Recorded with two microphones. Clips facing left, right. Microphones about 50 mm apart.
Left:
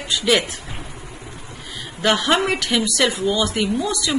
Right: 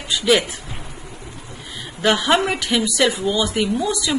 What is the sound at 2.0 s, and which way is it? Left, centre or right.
A woman's voice, centre.